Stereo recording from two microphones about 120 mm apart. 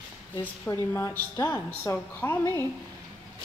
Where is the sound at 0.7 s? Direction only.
20° left (ahead or behind).